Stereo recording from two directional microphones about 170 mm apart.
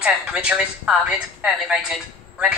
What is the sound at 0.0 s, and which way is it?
A woman's voice, 10° right (ahead or behind).